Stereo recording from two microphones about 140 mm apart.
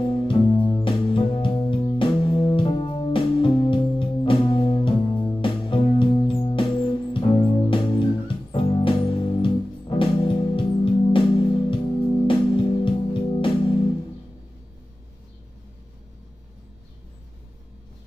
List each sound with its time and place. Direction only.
0.0 s music: 35° left (ahead or behind)